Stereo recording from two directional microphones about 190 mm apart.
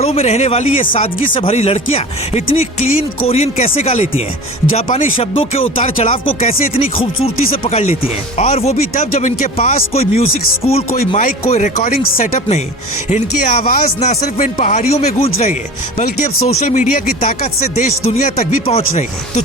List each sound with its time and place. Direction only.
0.0 s speech: 35° left (ahead or behind)
1.3 s speech: 30° left (ahead or behind)